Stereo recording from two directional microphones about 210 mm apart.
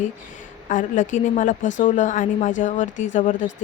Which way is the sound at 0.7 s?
35° left (ahead or behind).